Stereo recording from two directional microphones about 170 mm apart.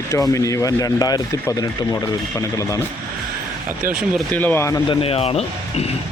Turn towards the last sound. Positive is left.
turn(degrees=35)  # may be behind; listen again after turning